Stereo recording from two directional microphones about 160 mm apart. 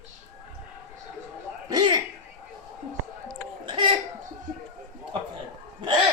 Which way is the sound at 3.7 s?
30° right (ahead or behind).